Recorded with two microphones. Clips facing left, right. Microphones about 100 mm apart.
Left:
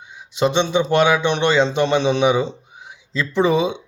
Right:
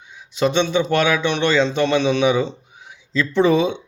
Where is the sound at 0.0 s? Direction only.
20° left (ahead or behind).